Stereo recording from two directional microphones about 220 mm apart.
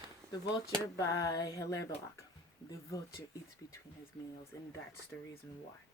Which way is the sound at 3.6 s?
15° left (ahead or behind).